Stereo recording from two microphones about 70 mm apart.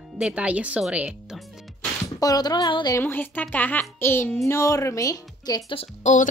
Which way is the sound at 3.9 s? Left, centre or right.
Left.